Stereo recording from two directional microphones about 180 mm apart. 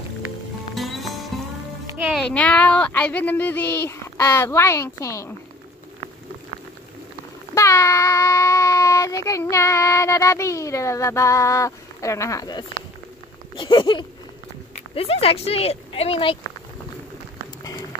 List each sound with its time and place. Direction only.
0.7 s music: centre (ahead or behind)
2.1 s child singing: 5° left (ahead or behind)
7.5 s child singing: 15° left (ahead or behind)
13.6 s speech: 25° left (ahead or behind)